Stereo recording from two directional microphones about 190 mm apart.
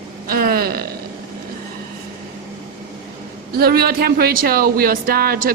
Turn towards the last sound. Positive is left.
turn(degrees=-50)  # may be behind; listen again after turning